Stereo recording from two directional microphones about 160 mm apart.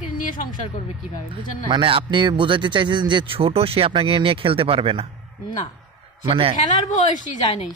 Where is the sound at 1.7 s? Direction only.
30° right (ahead or behind).